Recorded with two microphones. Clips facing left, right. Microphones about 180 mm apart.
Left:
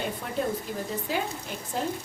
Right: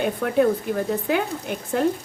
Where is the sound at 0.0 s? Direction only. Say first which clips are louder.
Right 10 dB; 65° right (ahead or behind).